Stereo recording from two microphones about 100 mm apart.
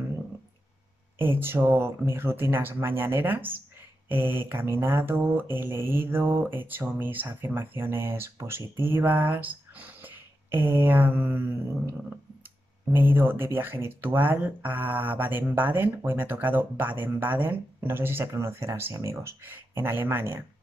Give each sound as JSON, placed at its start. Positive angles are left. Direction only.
{"t": 1.1, "sound": "speech", "side_deg": -20}
{"t": 12.9, "sound": "speech", "side_deg": -20}